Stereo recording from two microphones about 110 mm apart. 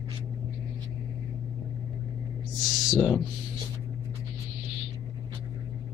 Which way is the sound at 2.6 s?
Centre (ahead or behind).